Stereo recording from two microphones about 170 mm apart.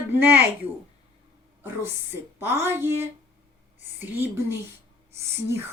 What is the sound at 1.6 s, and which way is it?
Speech, 15° right (ahead or behind).